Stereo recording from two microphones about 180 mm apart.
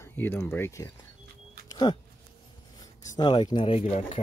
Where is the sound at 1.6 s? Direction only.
25° left (ahead or behind).